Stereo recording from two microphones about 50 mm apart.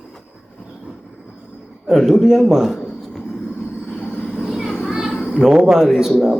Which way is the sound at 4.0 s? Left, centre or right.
Left.